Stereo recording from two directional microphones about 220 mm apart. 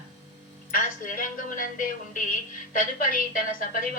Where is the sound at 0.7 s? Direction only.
40° left (ahead or behind).